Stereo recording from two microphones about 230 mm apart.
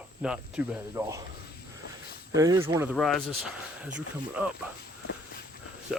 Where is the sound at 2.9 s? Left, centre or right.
Centre.